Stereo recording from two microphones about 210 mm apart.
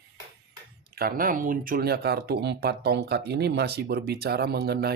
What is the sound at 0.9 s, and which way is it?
Speech, 45° right (ahead or behind).